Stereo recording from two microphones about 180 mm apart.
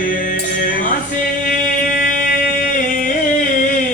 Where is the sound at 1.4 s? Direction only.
50° left (ahead or behind).